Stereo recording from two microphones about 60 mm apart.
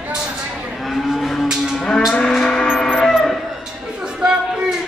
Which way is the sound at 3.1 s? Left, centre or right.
Centre.